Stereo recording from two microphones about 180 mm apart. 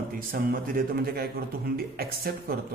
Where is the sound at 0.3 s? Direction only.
55° right (ahead or behind).